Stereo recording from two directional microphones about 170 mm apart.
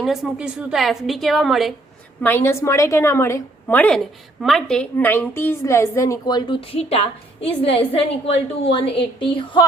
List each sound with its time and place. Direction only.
0.0 s a woman's voice: centre (ahead or behind)
2.2 s a woman's voice: 15° left (ahead or behind); by 9.6 s 30° left (ahead or behind)